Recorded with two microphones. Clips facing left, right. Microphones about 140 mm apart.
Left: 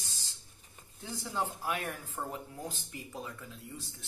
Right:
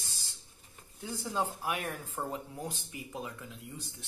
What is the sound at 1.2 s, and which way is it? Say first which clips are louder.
Speech: right 1 dB; 15° right (ahead or behind).